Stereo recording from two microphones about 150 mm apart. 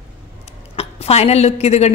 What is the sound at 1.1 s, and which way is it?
Speech, 45° left (ahead or behind).